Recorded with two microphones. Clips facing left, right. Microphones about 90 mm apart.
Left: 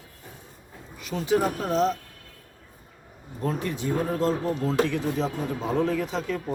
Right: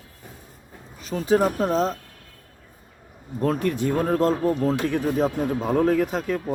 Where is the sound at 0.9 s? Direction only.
35° right (ahead or behind).